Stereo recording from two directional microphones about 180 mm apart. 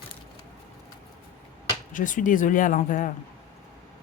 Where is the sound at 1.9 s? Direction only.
45° left (ahead or behind).